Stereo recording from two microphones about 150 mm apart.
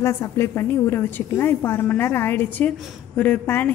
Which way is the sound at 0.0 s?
20° left (ahead or behind).